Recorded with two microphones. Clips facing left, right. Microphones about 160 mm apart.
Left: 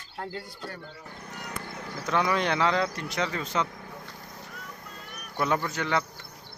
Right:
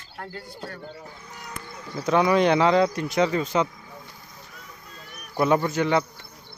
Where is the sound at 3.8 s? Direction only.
60° left (ahead or behind).